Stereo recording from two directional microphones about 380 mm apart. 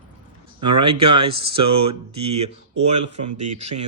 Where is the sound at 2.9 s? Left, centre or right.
Right.